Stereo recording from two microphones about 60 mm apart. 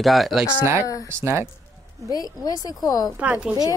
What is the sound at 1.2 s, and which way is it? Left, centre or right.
Speech, right.